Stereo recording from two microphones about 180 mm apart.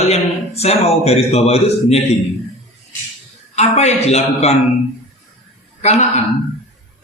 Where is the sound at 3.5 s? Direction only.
35° left (ahead or behind).